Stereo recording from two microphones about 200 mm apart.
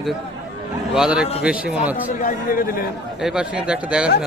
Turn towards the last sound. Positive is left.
turn(degrees=-5)  # may be behind; listen again after turning